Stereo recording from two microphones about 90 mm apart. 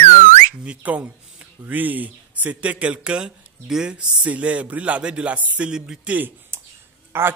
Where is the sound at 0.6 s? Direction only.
15° right (ahead or behind).